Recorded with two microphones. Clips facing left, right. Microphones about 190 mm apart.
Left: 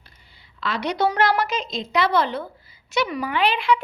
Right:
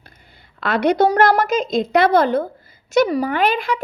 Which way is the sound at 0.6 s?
55° right (ahead or behind).